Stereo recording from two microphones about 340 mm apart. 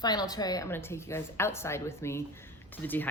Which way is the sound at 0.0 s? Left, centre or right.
Centre.